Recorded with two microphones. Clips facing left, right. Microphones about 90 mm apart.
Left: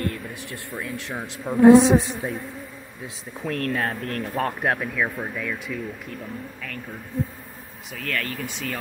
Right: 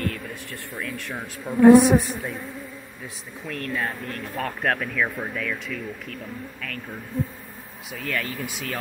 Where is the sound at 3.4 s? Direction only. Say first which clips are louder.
Left 3 dB; 45° left (ahead or behind).